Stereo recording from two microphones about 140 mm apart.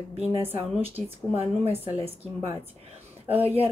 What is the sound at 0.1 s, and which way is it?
A woman's voice, 45° right (ahead or behind).